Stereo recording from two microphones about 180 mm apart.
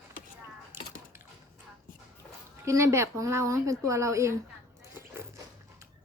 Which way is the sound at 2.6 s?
15° right (ahead or behind).